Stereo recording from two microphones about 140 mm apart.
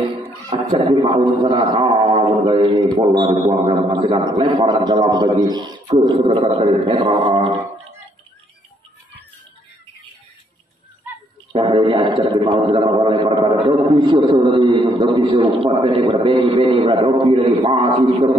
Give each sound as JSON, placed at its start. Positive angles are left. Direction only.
{"t": 0.7, "sound": "a man's voice", "side_deg": -40}
{"t": 6.1, "sound": "a man's voice", "side_deg": -45}
{"t": 11.6, "sound": "a man's voice", "side_deg": -35}